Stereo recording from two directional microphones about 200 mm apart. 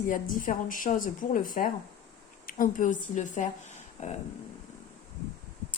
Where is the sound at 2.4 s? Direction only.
40° left (ahead or behind).